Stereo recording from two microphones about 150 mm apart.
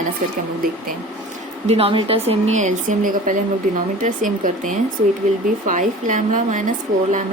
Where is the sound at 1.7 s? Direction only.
40° right (ahead or behind).